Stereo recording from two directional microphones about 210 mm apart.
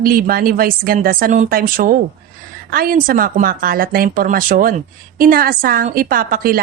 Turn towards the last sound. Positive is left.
turn(degrees=-45)  # may be behind; listen again after turning